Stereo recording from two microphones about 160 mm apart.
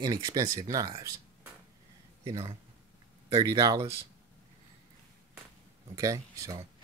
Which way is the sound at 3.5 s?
25° right (ahead or behind).